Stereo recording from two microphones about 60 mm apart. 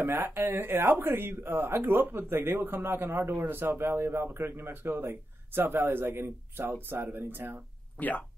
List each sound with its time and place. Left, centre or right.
0.0 s speech: right
8.0 s speech: left